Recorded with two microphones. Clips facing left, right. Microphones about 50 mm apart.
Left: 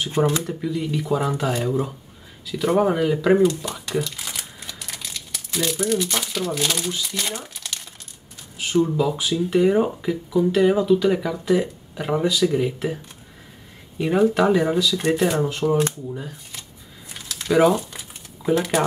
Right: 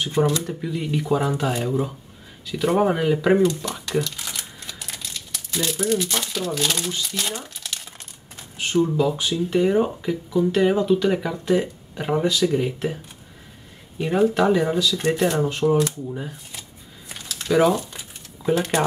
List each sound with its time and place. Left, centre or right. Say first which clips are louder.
0.2 s speech: even; right
0.5 s speech: left 1 dB; centre
3.3 s speech: left 1 dB; centre
4.0 s crumpling: even; centre
5.8 s speech: right 1 dB; centre
17.4 s a sound: left 1 dB; centre